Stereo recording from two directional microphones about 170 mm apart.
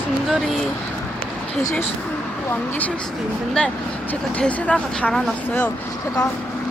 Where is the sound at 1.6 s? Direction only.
20° left (ahead or behind).